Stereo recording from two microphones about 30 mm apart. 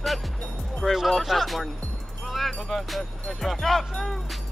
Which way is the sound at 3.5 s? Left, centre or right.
Centre.